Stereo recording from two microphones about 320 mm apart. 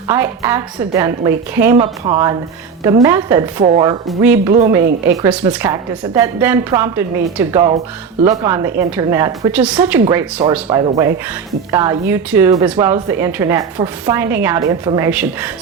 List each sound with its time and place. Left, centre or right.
0.1 s speech: centre
3.6 s speech: centre
4.1 s speech: centre
4.8 s speech: right
5.1 s speech: centre